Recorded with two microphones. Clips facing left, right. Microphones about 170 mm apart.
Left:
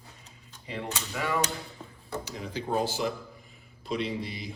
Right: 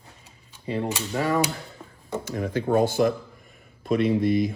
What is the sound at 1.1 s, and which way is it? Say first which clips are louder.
Speech: right 6 dB; 40° right (ahead or behind).